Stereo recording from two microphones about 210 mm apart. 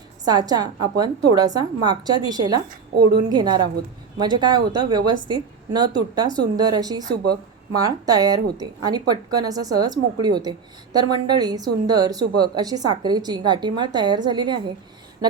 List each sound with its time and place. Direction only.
0.3 s a woman's voice: 20° right (ahead or behind)
2.6 s a woman's voice: 50° right (ahead or behind)
3.2 s a woman's voice: 20° right (ahead or behind)